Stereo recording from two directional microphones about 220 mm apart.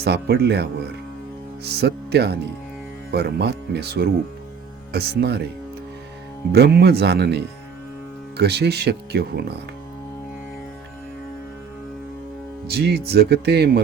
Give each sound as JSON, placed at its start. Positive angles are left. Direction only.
{"t": 0.0, "sound": "speech", "side_deg": -45}
{"t": 6.5, "sound": "speech", "side_deg": -45}
{"t": 12.7, "sound": "speech", "side_deg": -45}